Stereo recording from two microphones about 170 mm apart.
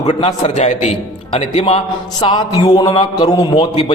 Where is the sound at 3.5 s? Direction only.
35° left (ahead or behind).